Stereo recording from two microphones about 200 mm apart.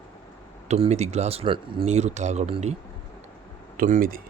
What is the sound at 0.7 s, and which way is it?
Speech, 35° right (ahead or behind).